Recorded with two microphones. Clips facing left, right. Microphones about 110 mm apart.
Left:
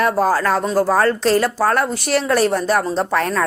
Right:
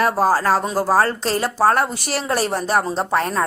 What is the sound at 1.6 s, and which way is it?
Speech, 30° right (ahead or behind).